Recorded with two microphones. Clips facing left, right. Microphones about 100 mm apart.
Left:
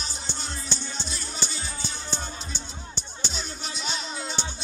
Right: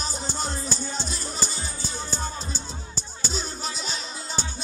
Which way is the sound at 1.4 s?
40° right (ahead or behind).